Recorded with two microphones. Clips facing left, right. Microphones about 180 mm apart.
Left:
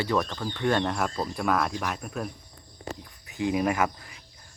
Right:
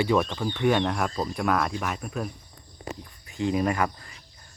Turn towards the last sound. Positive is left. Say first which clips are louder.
# even
turn(degrees=10)  # may be behind; listen again after turning